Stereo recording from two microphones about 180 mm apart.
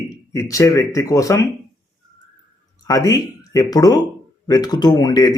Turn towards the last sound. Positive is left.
turn(degrees=20)  # may be behind; listen again after turning